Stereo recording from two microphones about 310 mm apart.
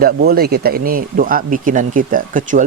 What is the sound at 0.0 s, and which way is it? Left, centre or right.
Speech, right.